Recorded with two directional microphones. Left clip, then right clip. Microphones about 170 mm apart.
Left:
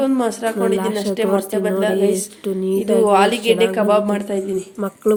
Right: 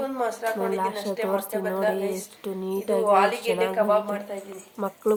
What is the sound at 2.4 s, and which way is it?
Speech, 20° left (ahead or behind).